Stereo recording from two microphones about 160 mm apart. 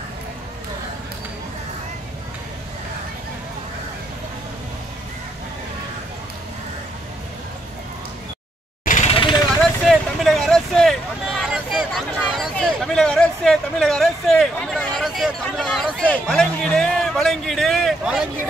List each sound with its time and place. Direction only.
8.8 s jackhammer: 50° left (ahead or behind)
9.1 s vehicle: 30° left (ahead or behind)
9.6 s a sound: centre (ahead or behind)
12.3 s speech: centre (ahead or behind)
15.0 s a sound: 5° right (ahead or behind)
15.4 s speech: 5° left (ahead or behind)